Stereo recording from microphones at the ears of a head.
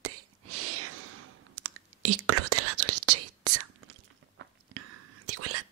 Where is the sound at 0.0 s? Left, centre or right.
Right.